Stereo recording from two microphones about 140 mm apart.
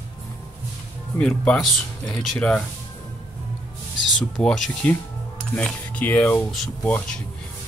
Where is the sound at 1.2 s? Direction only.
5° left (ahead or behind).